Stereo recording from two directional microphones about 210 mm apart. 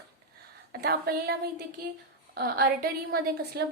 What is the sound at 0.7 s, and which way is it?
Speech, 45° right (ahead or behind).